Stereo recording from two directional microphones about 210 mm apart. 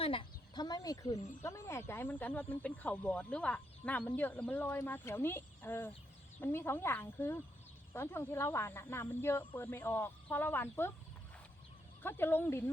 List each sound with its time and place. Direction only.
0.0 s chicken: 25° left (ahead or behind)
1.4 s speech: 15° left (ahead or behind)
12.0 s speech: 10° left (ahead or behind)